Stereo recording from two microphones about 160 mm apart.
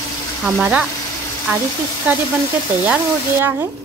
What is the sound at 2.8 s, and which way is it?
Speech, 15° right (ahead or behind).